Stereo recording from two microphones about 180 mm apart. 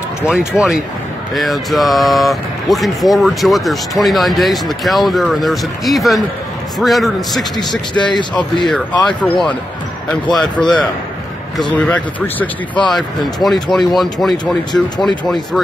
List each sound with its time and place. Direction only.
0.3 s speech: 5° right (ahead or behind)
7.9 s speech: 25° left (ahead or behind)
8.6 s speech: 5° left (ahead or behind)
10.3 s speech: centre (ahead or behind)